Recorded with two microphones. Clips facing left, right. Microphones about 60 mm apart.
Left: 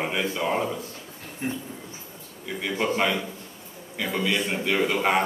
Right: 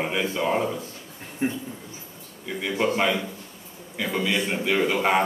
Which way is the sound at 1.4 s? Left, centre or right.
Right.